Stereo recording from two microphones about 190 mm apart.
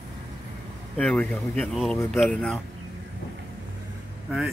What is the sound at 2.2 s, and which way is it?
Speech, 5° left (ahead or behind).